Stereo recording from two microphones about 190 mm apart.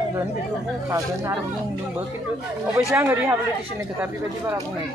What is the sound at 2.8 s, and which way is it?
A woman's voice, 15° right (ahead or behind).